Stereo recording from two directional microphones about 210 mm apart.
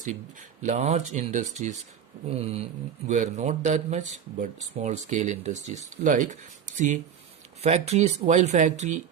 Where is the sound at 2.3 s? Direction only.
30° right (ahead or behind).